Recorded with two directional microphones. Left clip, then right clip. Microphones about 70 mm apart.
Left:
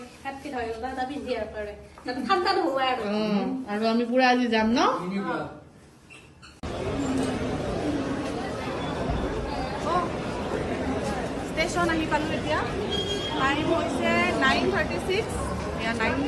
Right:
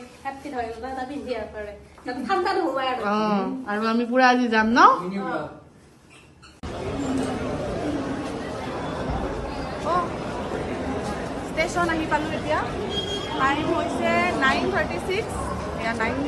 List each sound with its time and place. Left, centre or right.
0.3 s a woman's voice: right
6.7 s chatter: right